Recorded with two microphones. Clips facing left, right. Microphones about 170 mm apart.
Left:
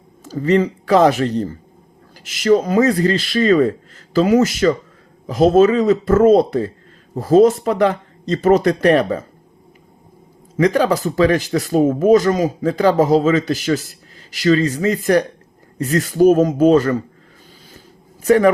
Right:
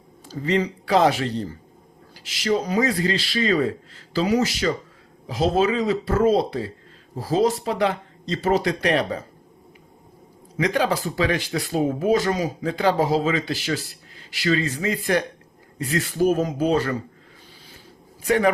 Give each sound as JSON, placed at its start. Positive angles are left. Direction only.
{"t": 0.3, "sound": "speech", "side_deg": 45}
{"t": 10.6, "sound": "speech", "side_deg": 40}
{"t": 17.7, "sound": "a sound", "side_deg": 40}